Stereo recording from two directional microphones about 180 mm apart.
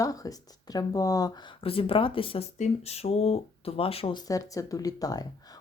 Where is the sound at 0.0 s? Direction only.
20° left (ahead or behind).